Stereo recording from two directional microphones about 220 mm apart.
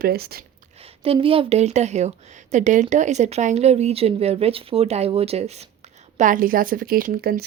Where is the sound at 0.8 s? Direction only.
25° right (ahead or behind).